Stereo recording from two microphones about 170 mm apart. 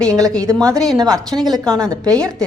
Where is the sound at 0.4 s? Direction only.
20° right (ahead or behind).